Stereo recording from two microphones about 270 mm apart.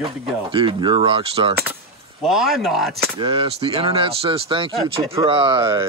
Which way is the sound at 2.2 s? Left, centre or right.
Centre.